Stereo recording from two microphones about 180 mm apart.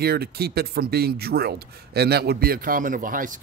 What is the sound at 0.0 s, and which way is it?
Speech, 60° right (ahead or behind).